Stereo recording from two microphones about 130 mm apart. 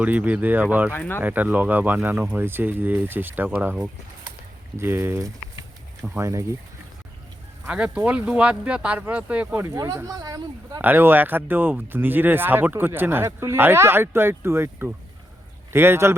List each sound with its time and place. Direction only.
0.0 s speech: 10° right (ahead or behind)
0.9 s speech: 15° left (ahead or behind)
1.2 s speech: 15° right (ahead or behind)
7.6 s speech: 10° right (ahead or behind)
9.6 s speech: 25° right (ahead or behind)
10.8 s speech: 15° right (ahead or behind)